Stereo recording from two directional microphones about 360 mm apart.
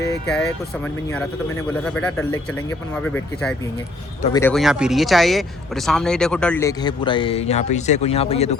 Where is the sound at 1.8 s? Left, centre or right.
Centre.